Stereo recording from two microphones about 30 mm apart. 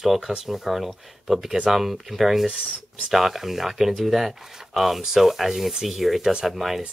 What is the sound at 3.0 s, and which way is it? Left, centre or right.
Speech, centre.